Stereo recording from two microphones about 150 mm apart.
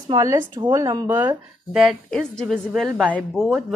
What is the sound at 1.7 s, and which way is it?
Speech, centre (ahead or behind).